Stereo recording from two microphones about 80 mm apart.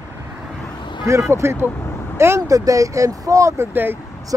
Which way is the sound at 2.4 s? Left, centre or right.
Right.